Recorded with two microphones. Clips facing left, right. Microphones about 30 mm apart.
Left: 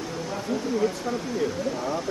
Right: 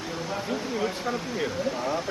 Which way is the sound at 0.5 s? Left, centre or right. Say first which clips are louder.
Left 5 dB; right.